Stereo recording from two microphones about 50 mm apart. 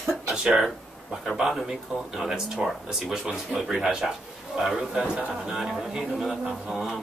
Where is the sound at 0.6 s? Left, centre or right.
Centre.